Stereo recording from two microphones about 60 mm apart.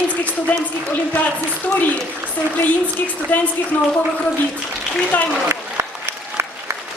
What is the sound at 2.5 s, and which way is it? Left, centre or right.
A woman's voice, left.